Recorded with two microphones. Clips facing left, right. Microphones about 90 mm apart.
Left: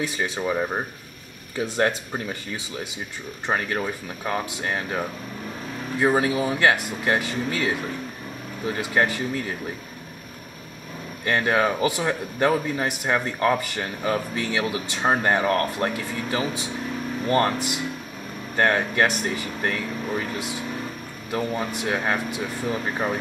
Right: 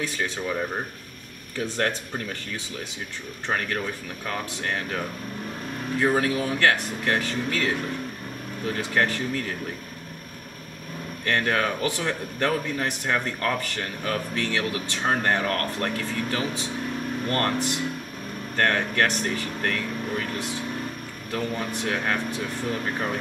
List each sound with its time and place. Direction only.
0.4 s a man's voice: 20° left (ahead or behind)
11.2 s a man's voice: 15° left (ahead or behind)